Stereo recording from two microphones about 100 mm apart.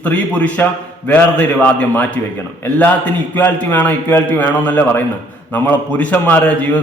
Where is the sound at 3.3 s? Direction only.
20° left (ahead or behind).